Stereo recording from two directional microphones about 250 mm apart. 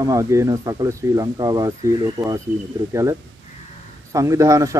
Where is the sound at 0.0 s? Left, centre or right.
Centre.